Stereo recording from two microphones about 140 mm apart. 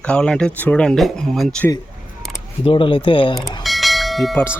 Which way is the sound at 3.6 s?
Centre (ahead or behind).